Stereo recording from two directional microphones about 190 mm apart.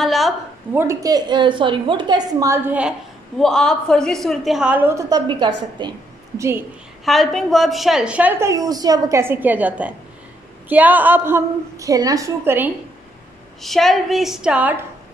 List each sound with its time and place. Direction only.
0.0 s a sound: centre (ahead or behind)
0.7 s a woman's voice: 15° right (ahead or behind)
3.3 s a woman's voice: 5° left (ahead or behind); by 6.6 s 15° right (ahead or behind)
7.1 s a woman's voice: centre (ahead or behind)
13.6 s a woman's voice: centre (ahead or behind)